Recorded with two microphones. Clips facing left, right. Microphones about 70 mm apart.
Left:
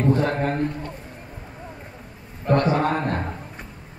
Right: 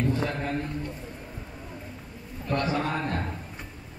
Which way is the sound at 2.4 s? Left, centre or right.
Left.